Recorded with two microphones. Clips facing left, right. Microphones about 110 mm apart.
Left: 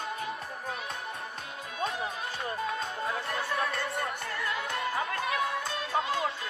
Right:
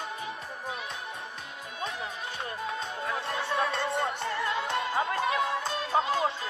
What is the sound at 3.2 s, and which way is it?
Music, 30° right (ahead or behind).